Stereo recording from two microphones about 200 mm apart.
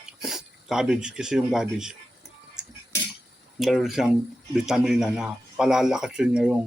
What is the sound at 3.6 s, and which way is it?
Speech, centre (ahead or behind).